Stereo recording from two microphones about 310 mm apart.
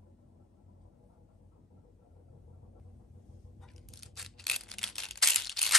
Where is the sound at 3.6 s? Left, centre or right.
Centre.